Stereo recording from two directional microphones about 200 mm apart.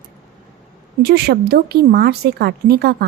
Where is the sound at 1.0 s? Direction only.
50° right (ahead or behind).